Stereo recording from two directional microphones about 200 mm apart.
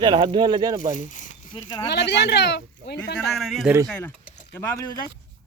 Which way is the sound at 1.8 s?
55° left (ahead or behind).